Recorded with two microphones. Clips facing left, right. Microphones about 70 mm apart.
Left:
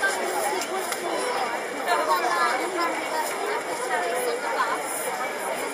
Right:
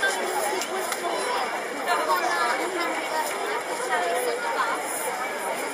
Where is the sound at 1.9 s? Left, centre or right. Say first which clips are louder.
Left 1 dB; centre.